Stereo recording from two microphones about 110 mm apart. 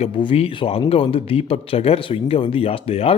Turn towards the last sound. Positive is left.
turn(degrees=60)  # may be behind; listen again after turning